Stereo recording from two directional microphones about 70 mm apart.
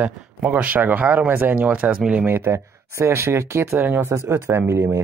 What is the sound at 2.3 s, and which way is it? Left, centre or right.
Speech, right.